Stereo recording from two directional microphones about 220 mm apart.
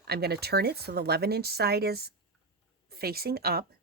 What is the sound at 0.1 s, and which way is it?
Speech, 45° right (ahead or behind).